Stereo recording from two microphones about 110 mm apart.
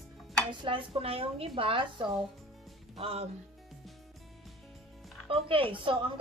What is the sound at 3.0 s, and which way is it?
Speech, 65° right (ahead or behind).